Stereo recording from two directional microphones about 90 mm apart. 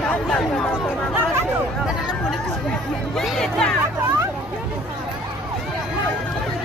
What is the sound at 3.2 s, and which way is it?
Chatter, 5° left (ahead or behind).